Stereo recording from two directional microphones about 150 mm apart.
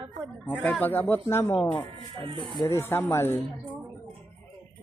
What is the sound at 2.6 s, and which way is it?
Speech, 15° left (ahead or behind).